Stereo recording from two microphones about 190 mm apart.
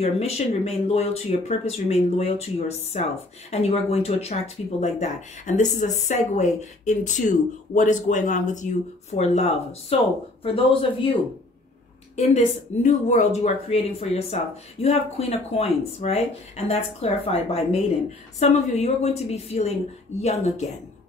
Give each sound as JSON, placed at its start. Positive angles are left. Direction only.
{"t": 0.0, "sound": "speech", "side_deg": 35}
{"t": 12.2, "sound": "speech", "side_deg": 40}